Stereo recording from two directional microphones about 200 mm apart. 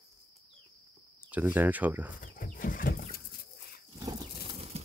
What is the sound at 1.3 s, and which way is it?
Speech, 10° right (ahead or behind).